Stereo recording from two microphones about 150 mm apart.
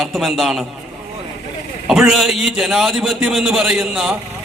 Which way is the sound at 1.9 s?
Centre (ahead or behind).